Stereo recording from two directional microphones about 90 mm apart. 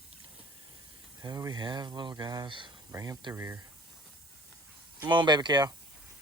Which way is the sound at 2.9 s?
35° right (ahead or behind).